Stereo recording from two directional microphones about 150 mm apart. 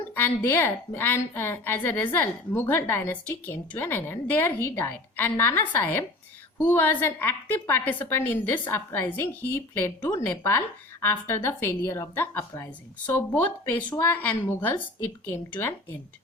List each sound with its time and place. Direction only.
0.1 s a woman's voice: 10° left (ahead or behind)